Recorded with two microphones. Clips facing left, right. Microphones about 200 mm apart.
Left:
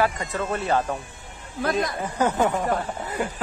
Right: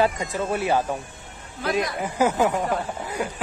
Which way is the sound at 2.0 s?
10° right (ahead or behind).